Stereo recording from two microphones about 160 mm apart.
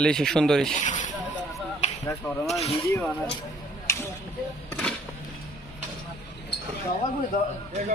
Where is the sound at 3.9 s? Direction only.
20° left (ahead or behind).